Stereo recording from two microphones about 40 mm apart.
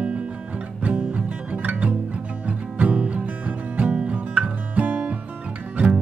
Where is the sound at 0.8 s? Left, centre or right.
Right.